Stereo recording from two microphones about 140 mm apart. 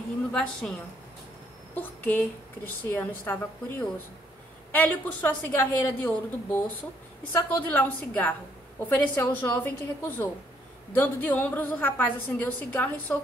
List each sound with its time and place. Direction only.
0.3 s a woman's voice: 5° left (ahead or behind)
1.8 s speech: 15° left (ahead or behind)